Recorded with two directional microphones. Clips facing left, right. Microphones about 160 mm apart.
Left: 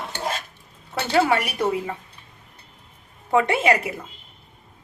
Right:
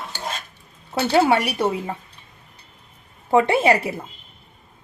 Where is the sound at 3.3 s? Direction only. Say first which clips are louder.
Right 3 dB; 30° right (ahead or behind).